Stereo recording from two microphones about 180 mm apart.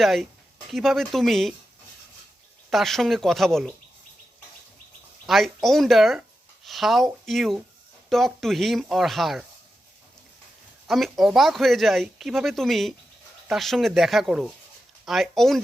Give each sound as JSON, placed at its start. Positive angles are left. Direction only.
{"t": 0.0, "sound": "speech", "side_deg": 0}
{"t": 2.6, "sound": "speech", "side_deg": 0}
{"t": 5.2, "sound": "speech", "side_deg": 0}
{"t": 10.8, "sound": "speech", "side_deg": 0}